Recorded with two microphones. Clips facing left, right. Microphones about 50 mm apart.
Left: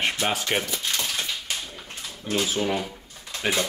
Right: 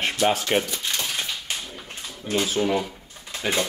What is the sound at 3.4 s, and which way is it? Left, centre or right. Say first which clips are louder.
Speech: even; centre.